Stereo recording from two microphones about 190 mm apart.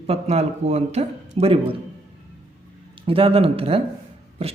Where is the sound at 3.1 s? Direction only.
30° right (ahead or behind).